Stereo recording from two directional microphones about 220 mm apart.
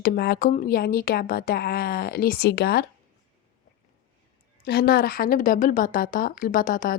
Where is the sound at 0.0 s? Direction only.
45° left (ahead or behind).